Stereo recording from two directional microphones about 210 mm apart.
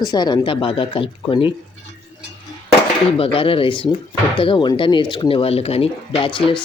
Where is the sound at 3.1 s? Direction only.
25° left (ahead or behind).